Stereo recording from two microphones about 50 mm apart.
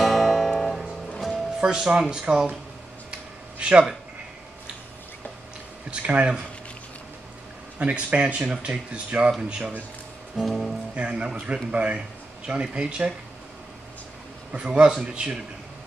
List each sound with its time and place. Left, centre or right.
0.0 s music: centre
1.6 s speech: centre
3.1 s a sound: right
5.9 s speech: right
7.8 s speech: right
10.4 s music: centre
11.0 s speech: centre
14.5 s speech: centre